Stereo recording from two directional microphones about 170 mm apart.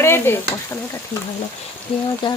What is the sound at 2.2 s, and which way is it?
Speech, 30° left (ahead or behind).